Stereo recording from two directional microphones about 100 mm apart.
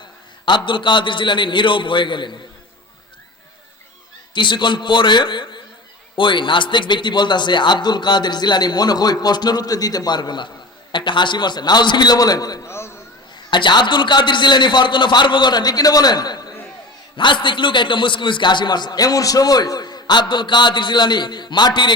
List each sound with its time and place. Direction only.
0.4 s a man's voice: 50° left (ahead or behind)
4.4 s a man's voice: 50° left (ahead or behind)
12.6 s chop: 25° left (ahead or behind)
13.5 s a man's voice: 50° left (ahead or behind)
17.2 s a man's voice: 55° left (ahead or behind)